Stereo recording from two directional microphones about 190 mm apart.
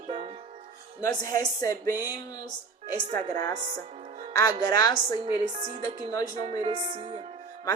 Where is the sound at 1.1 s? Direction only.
20° left (ahead or behind).